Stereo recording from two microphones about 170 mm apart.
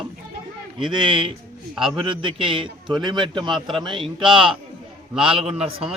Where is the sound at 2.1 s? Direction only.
30° right (ahead or behind).